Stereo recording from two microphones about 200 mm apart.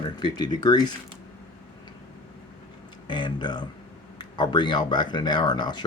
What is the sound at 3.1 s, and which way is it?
Speech, 20° left (ahead or behind).